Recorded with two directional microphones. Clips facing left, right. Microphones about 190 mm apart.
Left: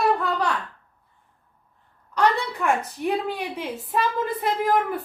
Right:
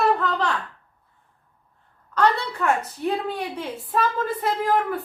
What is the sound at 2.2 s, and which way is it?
A woman's voice, 10° left (ahead or behind).